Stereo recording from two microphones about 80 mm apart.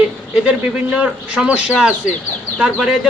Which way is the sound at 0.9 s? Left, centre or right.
Centre.